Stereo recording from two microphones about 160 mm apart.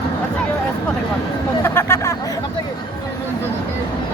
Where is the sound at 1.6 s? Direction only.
15° left (ahead or behind).